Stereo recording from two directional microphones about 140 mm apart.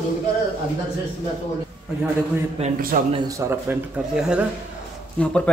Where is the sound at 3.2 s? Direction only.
20° right (ahead or behind).